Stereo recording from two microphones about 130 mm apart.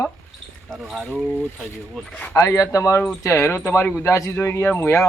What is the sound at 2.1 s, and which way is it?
Speech, 15° left (ahead or behind).